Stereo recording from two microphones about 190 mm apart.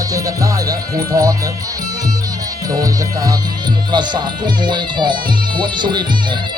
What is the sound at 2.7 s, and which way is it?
Speech, 20° right (ahead or behind).